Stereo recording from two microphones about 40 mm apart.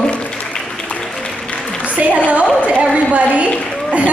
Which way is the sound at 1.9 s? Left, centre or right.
Right.